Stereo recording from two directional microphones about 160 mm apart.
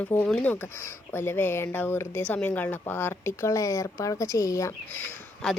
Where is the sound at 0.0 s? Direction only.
10° left (ahead or behind).